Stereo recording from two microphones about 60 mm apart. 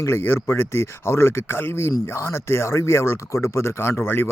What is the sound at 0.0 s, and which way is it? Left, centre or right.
Speech, left.